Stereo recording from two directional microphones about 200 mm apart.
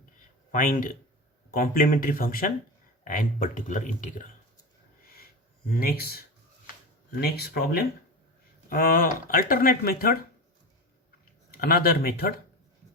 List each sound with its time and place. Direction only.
0.5 s speech: 45° left (ahead or behind)
5.8 s speech: 50° left (ahead or behind)
7.2 s speech: 50° left (ahead or behind)
11.5 s speech: 50° left (ahead or behind)